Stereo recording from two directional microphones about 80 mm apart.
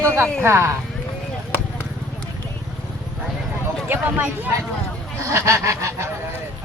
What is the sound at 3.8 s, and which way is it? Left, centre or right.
Speech, right.